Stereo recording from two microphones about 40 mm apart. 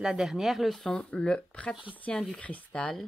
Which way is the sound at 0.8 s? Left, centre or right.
Centre.